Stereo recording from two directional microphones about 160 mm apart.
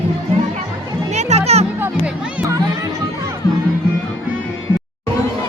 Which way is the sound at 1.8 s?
10° right (ahead or behind).